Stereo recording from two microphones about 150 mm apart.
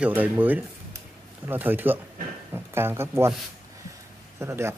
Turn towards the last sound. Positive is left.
turn(degrees=-15)  # may be behind; listen again after turning